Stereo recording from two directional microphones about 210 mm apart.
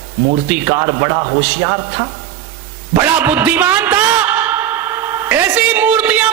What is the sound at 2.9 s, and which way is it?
A man's voice, 10° right (ahead or behind).